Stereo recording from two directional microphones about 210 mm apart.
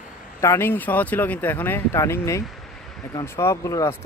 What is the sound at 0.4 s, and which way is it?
Speech, 10° left (ahead or behind).